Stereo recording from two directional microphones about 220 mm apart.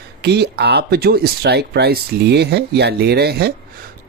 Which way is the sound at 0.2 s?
50° right (ahead or behind).